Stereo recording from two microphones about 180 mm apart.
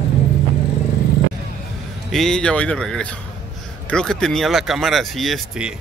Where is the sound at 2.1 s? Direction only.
5° left (ahead or behind).